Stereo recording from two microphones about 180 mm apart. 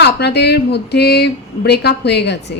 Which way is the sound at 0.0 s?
65° left (ahead or behind).